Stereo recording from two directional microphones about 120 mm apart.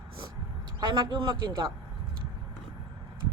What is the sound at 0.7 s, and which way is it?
Speech, 40° right (ahead or behind).